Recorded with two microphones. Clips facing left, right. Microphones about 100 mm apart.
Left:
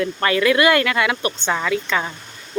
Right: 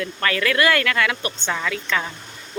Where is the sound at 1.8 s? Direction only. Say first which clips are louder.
Left 2 dB; 20° left (ahead or behind).